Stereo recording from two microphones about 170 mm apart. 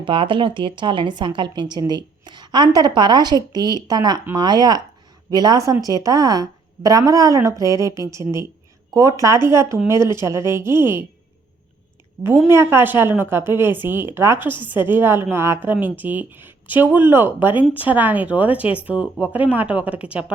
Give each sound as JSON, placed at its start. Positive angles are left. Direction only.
{"t": 0.0, "sound": "a woman's voice", "side_deg": -30}
{"t": 12.5, "sound": "a woman's voice", "side_deg": -15}